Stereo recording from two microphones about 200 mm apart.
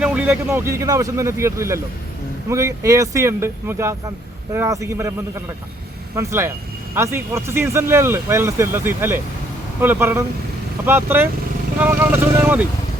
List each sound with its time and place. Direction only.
0.0 s speech: 5° right (ahead or behind)
6.1 s speech: 15° right (ahead or behind)
12.4 s speech: 10° right (ahead or behind)